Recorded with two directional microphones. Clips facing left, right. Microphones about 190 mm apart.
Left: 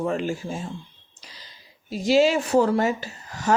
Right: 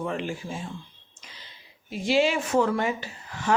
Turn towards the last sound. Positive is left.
turn(degrees=40)  # may be behind; listen again after turning